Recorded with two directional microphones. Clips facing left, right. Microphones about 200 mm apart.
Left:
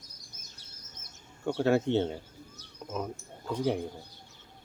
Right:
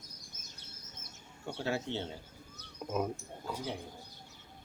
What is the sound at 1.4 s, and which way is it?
Speech, 55° left (ahead or behind).